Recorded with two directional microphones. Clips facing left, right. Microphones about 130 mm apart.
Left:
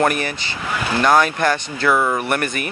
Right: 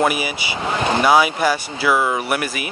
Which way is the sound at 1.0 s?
10° right (ahead or behind).